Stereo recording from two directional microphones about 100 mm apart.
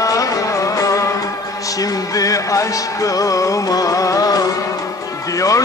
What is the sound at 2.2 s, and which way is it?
Music, 35° left (ahead or behind).